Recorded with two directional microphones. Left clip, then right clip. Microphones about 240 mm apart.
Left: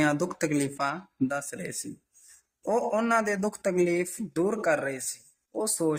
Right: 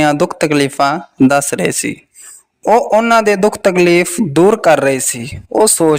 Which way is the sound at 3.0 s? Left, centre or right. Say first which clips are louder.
Right 16 dB; right.